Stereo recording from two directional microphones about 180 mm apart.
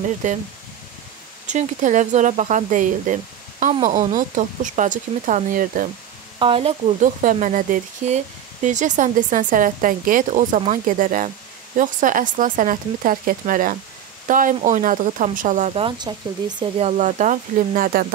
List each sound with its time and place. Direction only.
0.2 s speech: 45° right (ahead or behind)
1.5 s speech: 40° right (ahead or behind)
6.4 s speech: 35° right (ahead or behind); by 18.0 s 50° right (ahead or behind)